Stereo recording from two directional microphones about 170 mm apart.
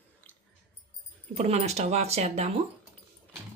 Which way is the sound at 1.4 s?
40° right (ahead or behind).